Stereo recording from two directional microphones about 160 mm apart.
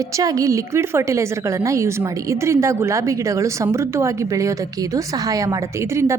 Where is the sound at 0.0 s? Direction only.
20° right (ahead or behind).